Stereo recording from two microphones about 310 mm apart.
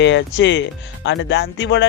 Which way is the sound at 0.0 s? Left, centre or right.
Left.